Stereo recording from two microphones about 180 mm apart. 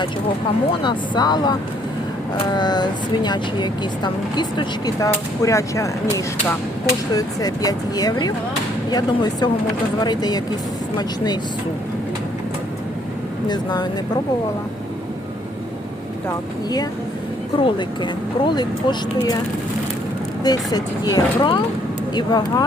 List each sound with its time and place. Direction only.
0.7 s speech: 25° left (ahead or behind)
13.5 s speech: 25° left (ahead or behind)
17.6 s speech: 25° left (ahead or behind)
20.4 s speech: 20° left (ahead or behind)